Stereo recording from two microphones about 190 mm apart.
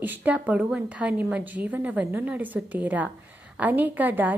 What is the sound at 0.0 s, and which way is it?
A woman's voice, 10° right (ahead or behind).